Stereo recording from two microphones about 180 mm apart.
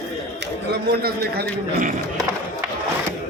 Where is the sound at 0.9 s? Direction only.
60° right (ahead or behind).